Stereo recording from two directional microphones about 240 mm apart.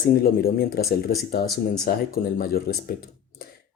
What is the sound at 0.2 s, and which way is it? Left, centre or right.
Speech, left.